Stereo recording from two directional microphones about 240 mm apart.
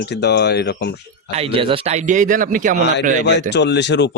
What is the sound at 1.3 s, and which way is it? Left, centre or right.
Speech, right.